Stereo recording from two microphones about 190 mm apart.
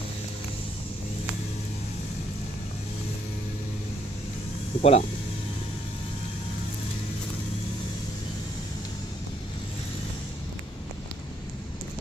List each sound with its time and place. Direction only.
4.8 s speech: 30° left (ahead or behind)